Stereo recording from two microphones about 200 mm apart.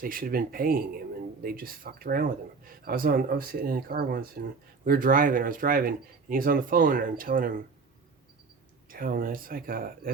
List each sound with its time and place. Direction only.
0.0 s speech: 45° right (ahead or behind)
8.9 s speech: 45° right (ahead or behind)